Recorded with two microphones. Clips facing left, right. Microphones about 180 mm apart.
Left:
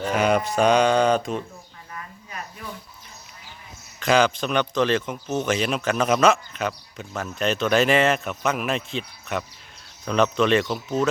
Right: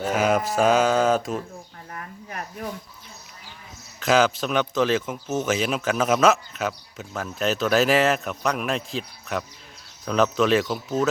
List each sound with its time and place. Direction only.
0.0 s speech: centre (ahead or behind)
1.9 s a sound: 55° right (ahead or behind)
4.0 s speech: 5° right (ahead or behind)